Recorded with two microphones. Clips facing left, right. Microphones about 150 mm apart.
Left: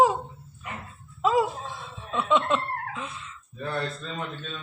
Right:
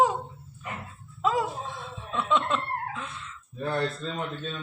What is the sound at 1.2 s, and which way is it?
Speech, centre (ahead or behind).